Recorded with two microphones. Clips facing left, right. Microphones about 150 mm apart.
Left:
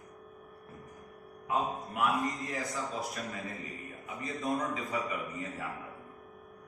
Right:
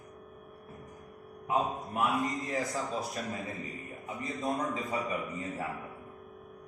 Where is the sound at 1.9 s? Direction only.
20° right (ahead or behind).